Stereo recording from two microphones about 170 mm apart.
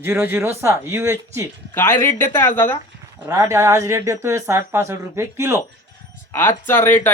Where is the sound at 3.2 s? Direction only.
20° right (ahead or behind).